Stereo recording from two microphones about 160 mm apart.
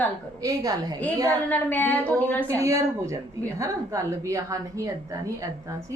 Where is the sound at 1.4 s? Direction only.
10° left (ahead or behind).